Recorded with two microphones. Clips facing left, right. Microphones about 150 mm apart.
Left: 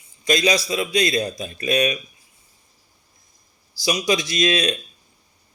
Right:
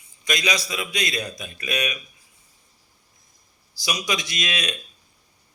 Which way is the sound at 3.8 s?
30° left (ahead or behind).